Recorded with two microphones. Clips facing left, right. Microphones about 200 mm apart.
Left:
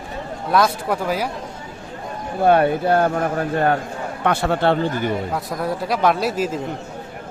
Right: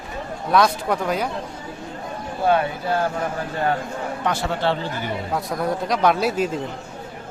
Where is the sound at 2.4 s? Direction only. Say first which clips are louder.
Left 5 dB; 55° left (ahead or behind).